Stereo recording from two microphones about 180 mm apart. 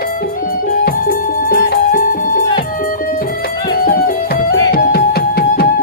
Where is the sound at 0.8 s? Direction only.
60° left (ahead or behind).